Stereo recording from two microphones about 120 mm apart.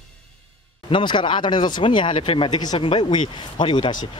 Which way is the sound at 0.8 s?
45° left (ahead or behind).